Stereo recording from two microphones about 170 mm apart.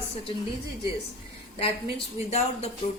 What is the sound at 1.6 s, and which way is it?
Speech, 35° left (ahead or behind).